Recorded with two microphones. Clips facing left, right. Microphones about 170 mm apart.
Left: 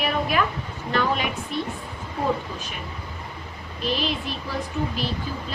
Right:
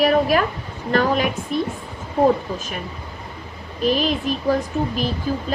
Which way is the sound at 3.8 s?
45° right (ahead or behind).